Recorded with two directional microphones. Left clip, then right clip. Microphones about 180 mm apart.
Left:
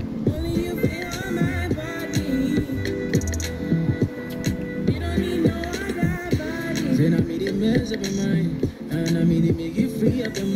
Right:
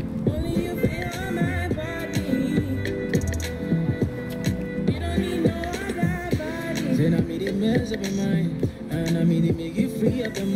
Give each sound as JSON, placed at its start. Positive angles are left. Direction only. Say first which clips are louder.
{"t": 0.6, "sound": "music", "louder": "left 1 dB", "side_deg": 30}
{"t": 4.0, "sound": "music", "louder": "left 1 dB", "side_deg": 30}